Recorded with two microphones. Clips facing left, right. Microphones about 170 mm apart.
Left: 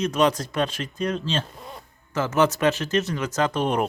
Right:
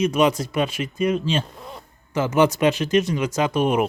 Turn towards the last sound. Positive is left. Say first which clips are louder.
# right 3 dB
turn(degrees=-10)  # may be behind; listen again after turning